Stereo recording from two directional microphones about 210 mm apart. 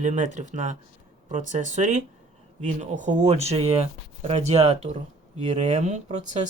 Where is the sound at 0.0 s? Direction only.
35° right (ahead or behind).